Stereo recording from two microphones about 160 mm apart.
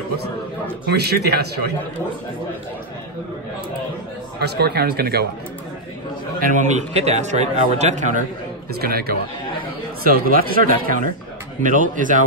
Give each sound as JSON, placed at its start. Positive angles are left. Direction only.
{"t": 0.8, "sound": "speech", "side_deg": -90}
{"t": 4.4, "sound": "speech", "side_deg": -90}
{"t": 6.4, "sound": "speech", "side_deg": -50}
{"t": 8.8, "sound": "a man's voice", "side_deg": -70}